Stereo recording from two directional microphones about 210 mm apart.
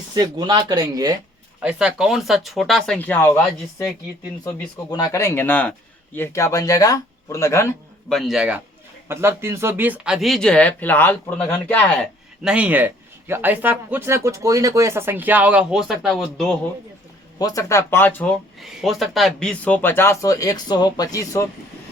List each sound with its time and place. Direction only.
0.1 s speech: 20° right (ahead or behind)
1.6 s speech: 5° right (ahead or behind); by 7.7 s 15° left (ahead or behind)
8.1 s speech: centre (ahead or behind)
12.4 s speech: 5° right (ahead or behind)
17.3 s speech: 15° left (ahead or behind)